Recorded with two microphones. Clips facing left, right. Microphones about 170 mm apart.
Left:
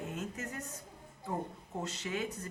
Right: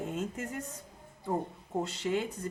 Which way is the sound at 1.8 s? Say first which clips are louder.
Right 7 dB; 30° right (ahead or behind).